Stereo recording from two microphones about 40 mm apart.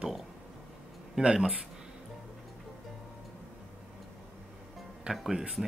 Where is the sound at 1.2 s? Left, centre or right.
Right.